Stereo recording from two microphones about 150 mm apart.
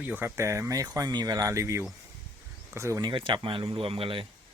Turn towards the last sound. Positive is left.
turn(degrees=-35)  # may be behind; listen again after turning